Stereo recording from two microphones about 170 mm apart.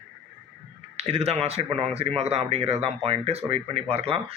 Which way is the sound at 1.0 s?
35° right (ahead or behind).